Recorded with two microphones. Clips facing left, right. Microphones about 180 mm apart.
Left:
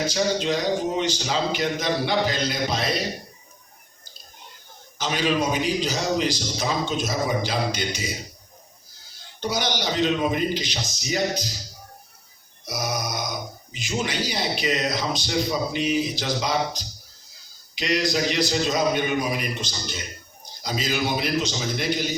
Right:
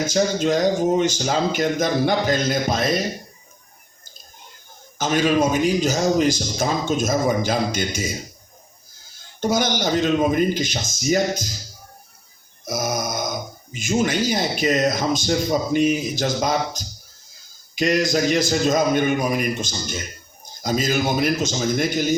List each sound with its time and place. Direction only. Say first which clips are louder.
0.0 s a man's voice: right 4 dB; 45° right (ahead or behind)
4.9 s a man's voice: right 5 dB; 50° right (ahead or behind)
9.1 s a man's voice: right 6 dB; 45° right (ahead or behind)
12.6 s a man's voice: right 4 dB; 50° right (ahead or behind)